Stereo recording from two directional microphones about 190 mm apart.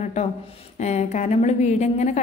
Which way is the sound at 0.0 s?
40° left (ahead or behind).